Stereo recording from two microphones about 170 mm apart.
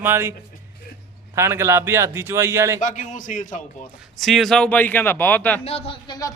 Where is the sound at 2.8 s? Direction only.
45° left (ahead or behind).